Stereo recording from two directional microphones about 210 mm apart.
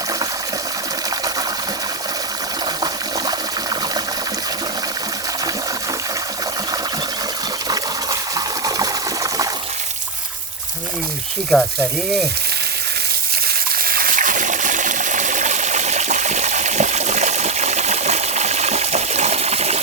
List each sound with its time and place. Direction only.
8.4 s water: 15° right (ahead or behind)
11.5 s speech: centre (ahead or behind)
13.8 s water: 45° right (ahead or behind)